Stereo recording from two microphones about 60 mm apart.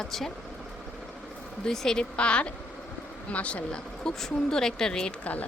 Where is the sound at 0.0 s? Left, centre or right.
Centre.